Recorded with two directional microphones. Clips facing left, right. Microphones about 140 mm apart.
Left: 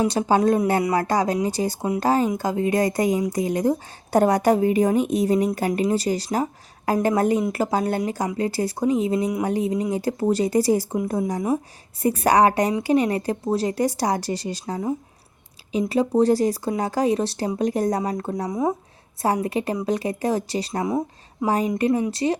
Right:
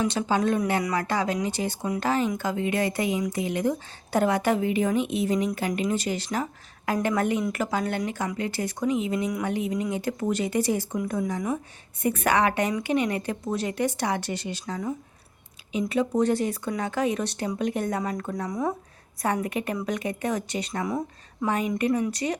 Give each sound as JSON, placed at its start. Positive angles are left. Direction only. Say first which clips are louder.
{"t": 0.0, "sound": "a woman's voice", "louder": "left 5 dB", "side_deg": 35}
{"t": 0.9, "sound": "a woman's voice", "louder": "left 5 dB", "side_deg": 40}